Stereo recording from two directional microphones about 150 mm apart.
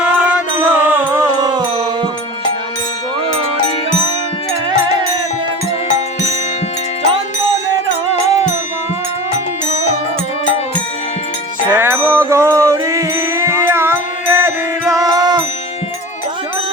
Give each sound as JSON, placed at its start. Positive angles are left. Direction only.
{"t": 0.0, "sound": "music", "side_deg": -10}
{"t": 1.4, "sound": "music", "side_deg": -30}
{"t": 11.8, "sound": "music", "side_deg": -15}